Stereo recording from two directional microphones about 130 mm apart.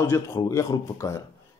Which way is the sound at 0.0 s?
25° left (ahead or behind).